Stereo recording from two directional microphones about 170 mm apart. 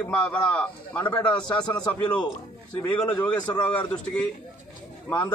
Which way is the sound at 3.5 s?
10° left (ahead or behind).